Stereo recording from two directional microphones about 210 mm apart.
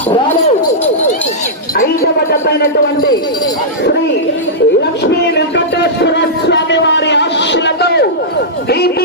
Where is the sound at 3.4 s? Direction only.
50° left (ahead or behind).